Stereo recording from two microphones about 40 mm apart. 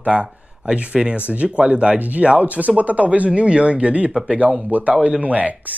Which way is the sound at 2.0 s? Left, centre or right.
Right.